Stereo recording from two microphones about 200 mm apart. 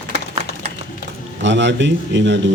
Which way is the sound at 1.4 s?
65° right (ahead or behind).